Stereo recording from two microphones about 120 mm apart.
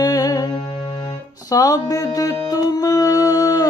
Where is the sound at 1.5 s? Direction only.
30° left (ahead or behind).